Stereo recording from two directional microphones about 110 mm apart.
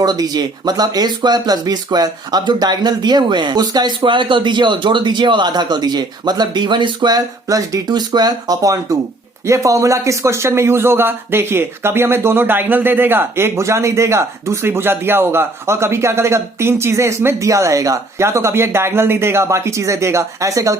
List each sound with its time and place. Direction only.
0.0 s speech: 40° right (ahead or behind)